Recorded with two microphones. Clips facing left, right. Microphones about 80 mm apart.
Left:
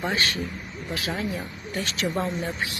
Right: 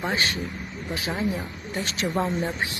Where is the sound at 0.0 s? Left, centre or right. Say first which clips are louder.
Even; right.